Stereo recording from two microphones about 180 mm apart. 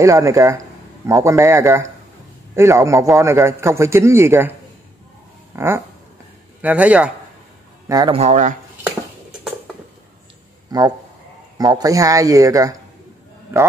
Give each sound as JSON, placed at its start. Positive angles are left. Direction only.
{"t": 0.0, "sound": "a man's voice", "side_deg": -15}
{"t": 7.9, "sound": "speech", "side_deg": -20}
{"t": 8.2, "sound": "speech", "side_deg": -40}
{"t": 10.7, "sound": "speech", "side_deg": -20}